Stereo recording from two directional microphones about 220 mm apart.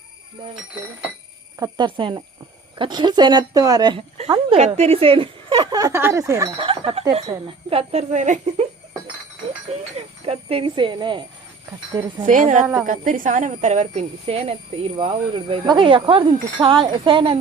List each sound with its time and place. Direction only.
1.5 s speech: 15° right (ahead or behind); by 8.6 s 30° right (ahead or behind)
9.7 s a sound: 30° right (ahead or behind)
10.2 s speech: 25° right (ahead or behind)
12.2 s a woman's voice: 35° right (ahead or behind)